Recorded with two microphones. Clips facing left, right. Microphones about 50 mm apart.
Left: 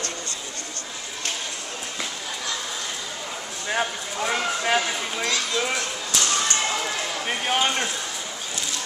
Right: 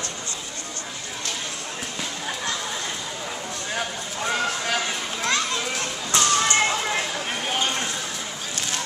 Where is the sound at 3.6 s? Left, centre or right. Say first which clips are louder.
Left 5 dB; centre.